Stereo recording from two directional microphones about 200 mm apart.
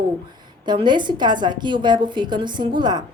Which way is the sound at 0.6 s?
20° right (ahead or behind).